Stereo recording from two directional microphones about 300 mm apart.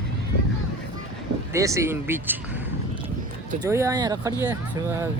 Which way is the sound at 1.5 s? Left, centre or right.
Centre.